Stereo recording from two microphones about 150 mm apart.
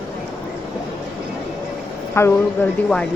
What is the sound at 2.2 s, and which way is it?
Speech, 15° left (ahead or behind).